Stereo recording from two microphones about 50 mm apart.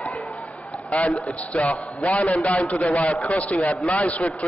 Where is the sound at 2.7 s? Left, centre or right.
Left.